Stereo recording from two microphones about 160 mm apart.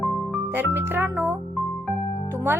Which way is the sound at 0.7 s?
15° right (ahead or behind).